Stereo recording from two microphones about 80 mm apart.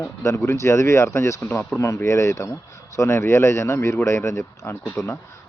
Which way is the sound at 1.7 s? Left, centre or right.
Left.